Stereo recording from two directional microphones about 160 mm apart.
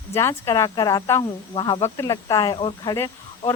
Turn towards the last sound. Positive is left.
turn(degrees=15)  # may be behind; listen again after turning